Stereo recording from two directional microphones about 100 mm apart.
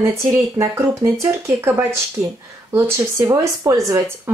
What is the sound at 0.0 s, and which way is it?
A woman's voice, 30° right (ahead or behind).